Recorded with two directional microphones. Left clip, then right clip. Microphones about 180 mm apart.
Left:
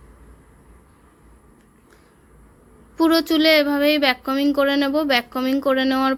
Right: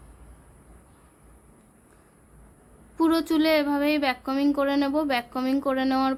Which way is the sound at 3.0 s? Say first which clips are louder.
Left 5 dB; 10° left (ahead or behind).